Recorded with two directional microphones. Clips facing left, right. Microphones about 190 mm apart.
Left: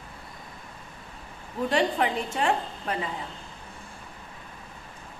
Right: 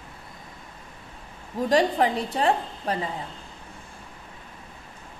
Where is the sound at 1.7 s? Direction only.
35° right (ahead or behind).